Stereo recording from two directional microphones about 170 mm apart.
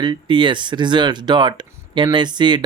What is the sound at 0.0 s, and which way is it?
Speech, 25° right (ahead or behind).